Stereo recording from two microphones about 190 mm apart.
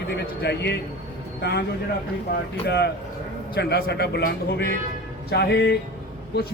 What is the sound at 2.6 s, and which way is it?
Speech, 60° left (ahead or behind).